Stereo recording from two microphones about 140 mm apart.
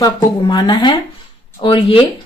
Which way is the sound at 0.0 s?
30° left (ahead or behind).